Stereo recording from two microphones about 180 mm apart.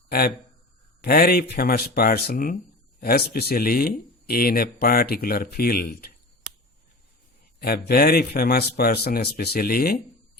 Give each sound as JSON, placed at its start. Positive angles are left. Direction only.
{"t": 0.1, "sound": "a man's voice", "side_deg": 55}
{"t": 7.6, "sound": "speech", "side_deg": 60}